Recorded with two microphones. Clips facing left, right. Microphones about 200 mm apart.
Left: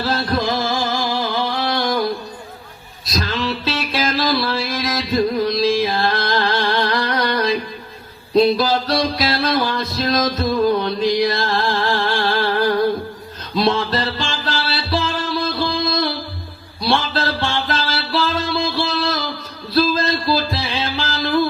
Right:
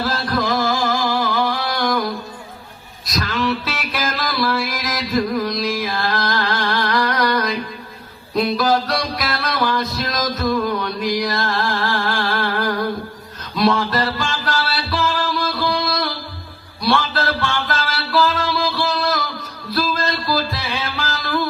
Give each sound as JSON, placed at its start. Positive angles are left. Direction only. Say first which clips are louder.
{"t": 0.0, "sound": "music", "louder": "left 1 dB", "side_deg": 30}
{"t": 3.1, "sound": "music", "louder": "right 1 dB", "side_deg": 30}